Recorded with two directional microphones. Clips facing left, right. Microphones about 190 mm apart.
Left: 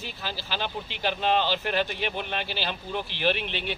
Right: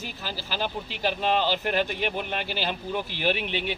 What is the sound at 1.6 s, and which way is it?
Speech, 45° right (ahead or behind).